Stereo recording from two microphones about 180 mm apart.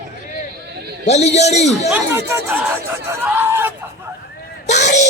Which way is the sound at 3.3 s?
10° right (ahead or behind).